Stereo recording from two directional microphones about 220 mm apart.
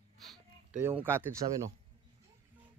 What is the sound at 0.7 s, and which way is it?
Speech, 10° right (ahead or behind).